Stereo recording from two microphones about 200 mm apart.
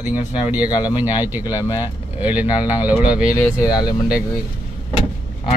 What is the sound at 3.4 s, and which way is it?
Speech, 15° left (ahead or behind).